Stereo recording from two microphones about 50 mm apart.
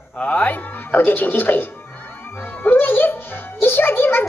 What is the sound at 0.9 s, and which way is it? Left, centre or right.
Speech, left.